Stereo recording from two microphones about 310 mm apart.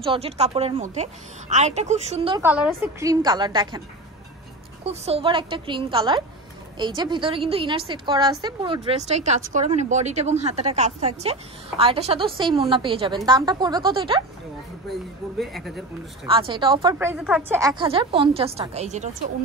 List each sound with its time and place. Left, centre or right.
0.0 s a woman's voice: centre
2.4 s a woman's voice: centre
4.8 s a woman's voice: centre
14.9 s speech: centre
16.3 s a woman's voice: centre